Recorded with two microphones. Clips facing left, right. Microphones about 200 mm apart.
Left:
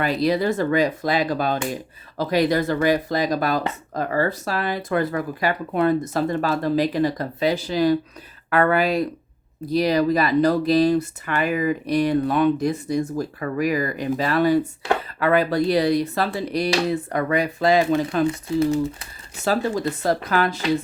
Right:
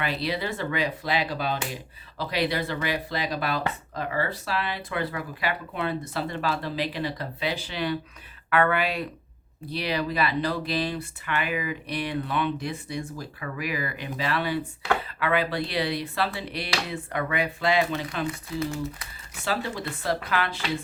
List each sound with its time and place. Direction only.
0.0 s speech: 45° left (ahead or behind)
18.3 s speech: 30° left (ahead or behind)
19.5 s speech: 40° left (ahead or behind)